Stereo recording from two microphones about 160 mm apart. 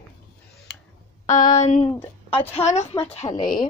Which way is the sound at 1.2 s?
50° left (ahead or behind).